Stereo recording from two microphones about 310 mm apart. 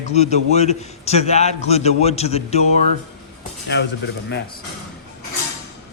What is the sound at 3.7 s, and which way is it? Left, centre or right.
Speech, left.